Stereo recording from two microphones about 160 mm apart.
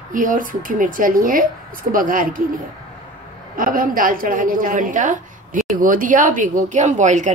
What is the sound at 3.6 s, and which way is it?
A woman's voice, 60° right (ahead or behind).